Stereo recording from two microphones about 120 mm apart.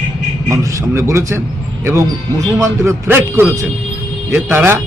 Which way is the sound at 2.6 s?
20° right (ahead or behind).